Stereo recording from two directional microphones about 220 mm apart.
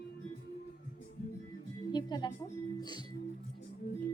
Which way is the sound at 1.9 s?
20° left (ahead or behind).